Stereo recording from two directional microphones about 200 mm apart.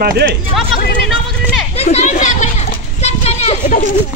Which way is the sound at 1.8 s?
35° left (ahead or behind).